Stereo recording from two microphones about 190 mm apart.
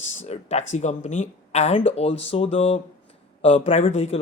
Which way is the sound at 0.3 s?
35° left (ahead or behind).